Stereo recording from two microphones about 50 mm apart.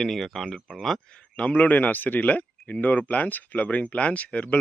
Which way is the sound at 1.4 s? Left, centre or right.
Left.